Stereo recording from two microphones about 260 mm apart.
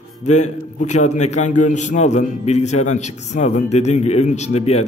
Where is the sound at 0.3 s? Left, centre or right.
Left.